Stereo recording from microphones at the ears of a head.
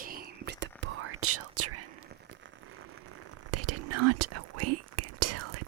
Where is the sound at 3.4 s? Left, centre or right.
Right.